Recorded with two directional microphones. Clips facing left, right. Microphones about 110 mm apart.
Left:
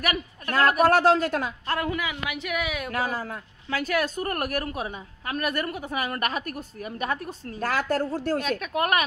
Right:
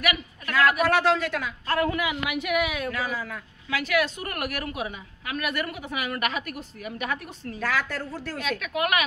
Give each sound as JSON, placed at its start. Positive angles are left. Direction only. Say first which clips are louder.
{"t": 0.0, "sound": "speech", "louder": "even", "side_deg": 40}
{"t": 1.7, "sound": "a woman's voice", "louder": "right 4 dB", "side_deg": 20}
{"t": 2.0, "sound": "a woman's voice", "louder": "right 3 dB", "side_deg": -5}
{"t": 2.9, "sound": "speech", "louder": "left 2 dB", "side_deg": 50}